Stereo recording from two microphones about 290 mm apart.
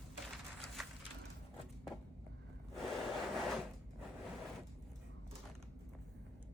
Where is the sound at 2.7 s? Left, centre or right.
Centre.